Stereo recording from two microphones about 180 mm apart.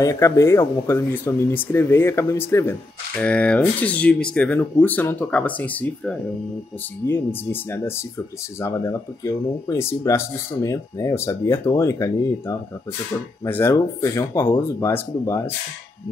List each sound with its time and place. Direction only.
0.0 s speech: 15° left (ahead or behind)